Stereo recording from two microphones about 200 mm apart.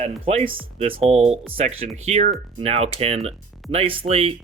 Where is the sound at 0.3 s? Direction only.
30° right (ahead or behind).